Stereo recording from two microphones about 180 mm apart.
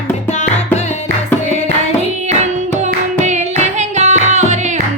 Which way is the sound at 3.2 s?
40° right (ahead or behind).